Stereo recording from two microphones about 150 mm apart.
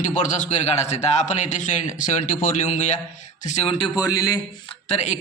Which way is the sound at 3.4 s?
40° left (ahead or behind).